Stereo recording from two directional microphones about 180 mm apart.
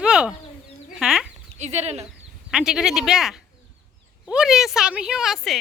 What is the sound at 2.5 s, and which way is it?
Speech, 5° right (ahead or behind).